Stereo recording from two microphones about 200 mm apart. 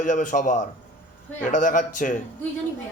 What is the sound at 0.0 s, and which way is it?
Speech, 40° left (ahead or behind).